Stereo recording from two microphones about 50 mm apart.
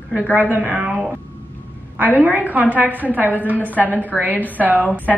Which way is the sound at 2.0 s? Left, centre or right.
Right.